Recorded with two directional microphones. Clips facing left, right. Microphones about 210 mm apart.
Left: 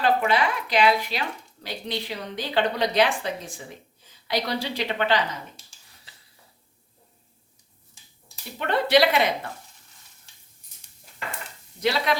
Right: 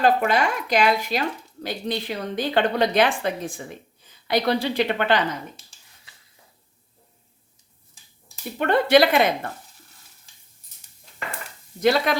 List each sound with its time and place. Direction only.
0.0 s a woman's voice: 45° right (ahead or behind)
8.5 s a woman's voice: 50° right (ahead or behind)
11.8 s a woman's voice: 50° right (ahead or behind)